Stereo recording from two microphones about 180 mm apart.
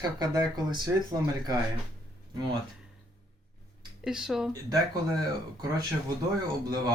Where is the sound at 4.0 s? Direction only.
5° right (ahead or behind).